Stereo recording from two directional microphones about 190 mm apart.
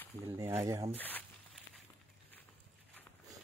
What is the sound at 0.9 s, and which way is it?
Speech, 10° left (ahead or behind).